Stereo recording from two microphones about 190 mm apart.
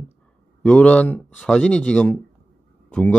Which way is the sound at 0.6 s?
5° left (ahead or behind).